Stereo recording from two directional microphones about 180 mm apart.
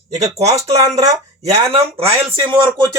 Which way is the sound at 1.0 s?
35° right (ahead or behind).